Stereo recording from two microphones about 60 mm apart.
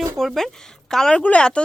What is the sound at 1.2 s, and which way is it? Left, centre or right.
Speech, centre.